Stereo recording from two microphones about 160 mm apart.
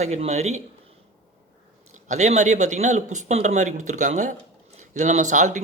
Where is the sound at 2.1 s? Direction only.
45° right (ahead or behind).